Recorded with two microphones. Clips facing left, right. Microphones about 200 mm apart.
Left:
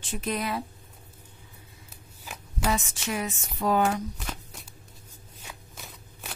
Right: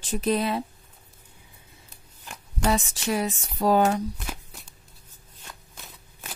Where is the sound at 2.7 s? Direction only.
35° right (ahead or behind).